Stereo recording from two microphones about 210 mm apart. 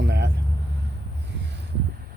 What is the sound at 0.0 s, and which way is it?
Vehicle, 55° right (ahead or behind).